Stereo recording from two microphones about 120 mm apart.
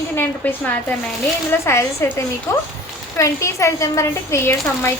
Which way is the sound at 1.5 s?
25° left (ahead or behind).